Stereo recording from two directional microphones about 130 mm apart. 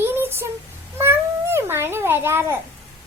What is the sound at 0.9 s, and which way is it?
Cat, 20° right (ahead or behind).